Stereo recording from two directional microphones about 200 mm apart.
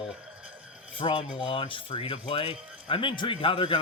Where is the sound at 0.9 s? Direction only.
25° left (ahead or behind).